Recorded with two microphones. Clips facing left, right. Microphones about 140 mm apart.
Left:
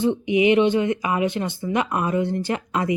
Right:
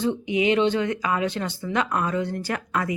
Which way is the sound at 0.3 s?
15° left (ahead or behind).